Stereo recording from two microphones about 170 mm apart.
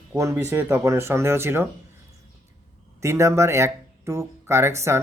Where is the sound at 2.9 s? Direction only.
15° right (ahead or behind).